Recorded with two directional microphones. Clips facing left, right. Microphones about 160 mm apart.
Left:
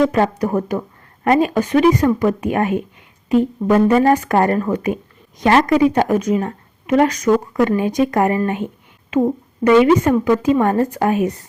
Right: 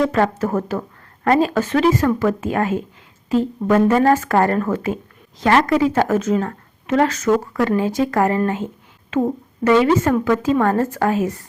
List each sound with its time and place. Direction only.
0.1 s speech: 15° left (ahead or behind)
8.4 s a sound: 15° left (ahead or behind)
9.9 s speech: 15° left (ahead or behind)